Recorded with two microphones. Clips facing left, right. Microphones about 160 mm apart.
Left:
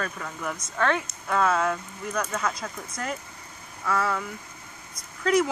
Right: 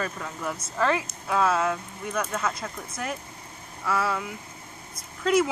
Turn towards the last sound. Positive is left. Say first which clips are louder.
# even
turn(degrees=0)  # may be behind; listen again after turning